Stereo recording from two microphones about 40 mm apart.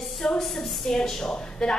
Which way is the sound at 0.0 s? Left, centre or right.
Centre.